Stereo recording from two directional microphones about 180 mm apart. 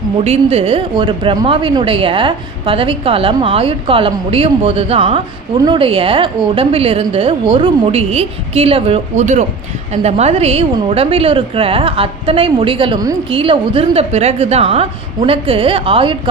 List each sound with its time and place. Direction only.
0.3 s a woman's voice: 30° right (ahead or behind)